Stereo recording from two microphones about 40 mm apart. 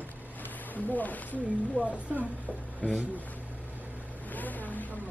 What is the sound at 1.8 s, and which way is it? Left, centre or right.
Speech, right.